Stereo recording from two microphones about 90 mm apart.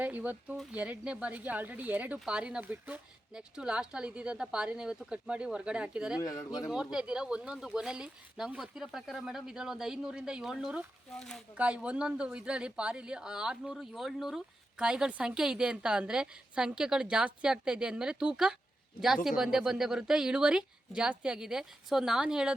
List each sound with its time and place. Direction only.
0.0 s speech: 20° right (ahead or behind)
6.1 s speech: 40° left (ahead or behind)
6.6 s speech: 5° right (ahead or behind)
11.2 s speech: 5° left (ahead or behind)
11.5 s speech: 15° right (ahead or behind)